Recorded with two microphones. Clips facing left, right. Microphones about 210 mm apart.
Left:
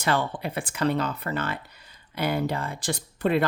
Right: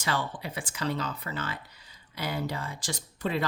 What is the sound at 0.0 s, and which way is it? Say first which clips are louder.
Speech: left 6 dB; 60° left (ahead or behind).